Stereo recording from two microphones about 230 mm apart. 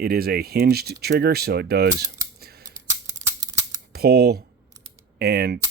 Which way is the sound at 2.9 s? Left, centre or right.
Centre.